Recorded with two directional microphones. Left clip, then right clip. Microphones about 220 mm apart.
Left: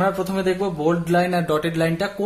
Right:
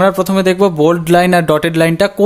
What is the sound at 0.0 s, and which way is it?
Speech, 50° right (ahead or behind).